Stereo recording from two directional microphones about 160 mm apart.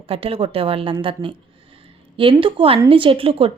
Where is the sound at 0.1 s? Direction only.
35° right (ahead or behind).